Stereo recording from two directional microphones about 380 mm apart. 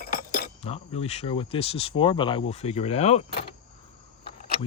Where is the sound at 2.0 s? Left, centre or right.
Centre.